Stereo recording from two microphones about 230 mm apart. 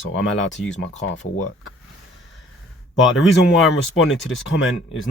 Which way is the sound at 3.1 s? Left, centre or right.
Left.